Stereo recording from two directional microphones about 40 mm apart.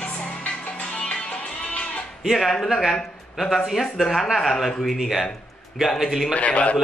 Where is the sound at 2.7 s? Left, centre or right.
Centre.